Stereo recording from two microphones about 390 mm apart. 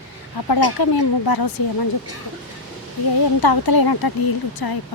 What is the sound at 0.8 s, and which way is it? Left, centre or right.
Speech, left.